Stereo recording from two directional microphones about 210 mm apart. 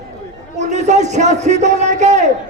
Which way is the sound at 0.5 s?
35° right (ahead or behind).